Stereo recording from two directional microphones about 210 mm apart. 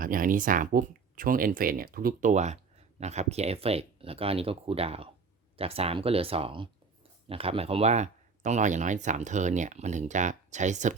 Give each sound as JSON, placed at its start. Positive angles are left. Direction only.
{"t": 0.0, "sound": "speech", "side_deg": -40}